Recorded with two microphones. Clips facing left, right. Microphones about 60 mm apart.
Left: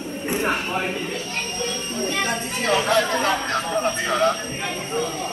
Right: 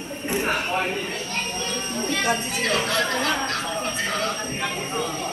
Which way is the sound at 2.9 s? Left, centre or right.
Left.